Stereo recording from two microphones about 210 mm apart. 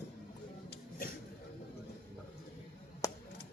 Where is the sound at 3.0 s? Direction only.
15° left (ahead or behind).